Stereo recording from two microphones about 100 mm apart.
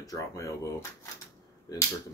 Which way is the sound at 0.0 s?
35° left (ahead or behind).